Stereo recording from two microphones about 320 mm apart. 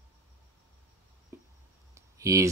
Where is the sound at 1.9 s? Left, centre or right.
Centre.